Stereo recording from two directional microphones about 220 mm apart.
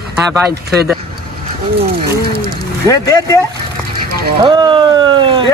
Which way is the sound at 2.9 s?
15° left (ahead or behind).